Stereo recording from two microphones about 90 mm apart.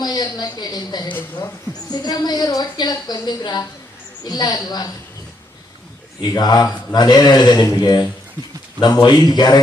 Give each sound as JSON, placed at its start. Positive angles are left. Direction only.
{"t": 0.0, "sound": "a woman's voice", "side_deg": 50}
{"t": 6.2, "sound": "a woman's voice", "side_deg": 50}